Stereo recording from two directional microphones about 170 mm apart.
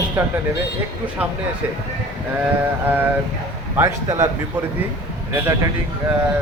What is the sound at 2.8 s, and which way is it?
Speech, 10° right (ahead or behind).